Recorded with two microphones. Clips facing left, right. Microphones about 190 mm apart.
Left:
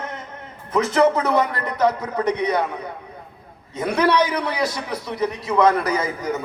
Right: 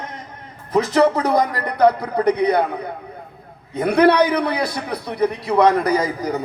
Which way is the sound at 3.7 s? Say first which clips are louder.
Right 5 dB; 60° right (ahead or behind).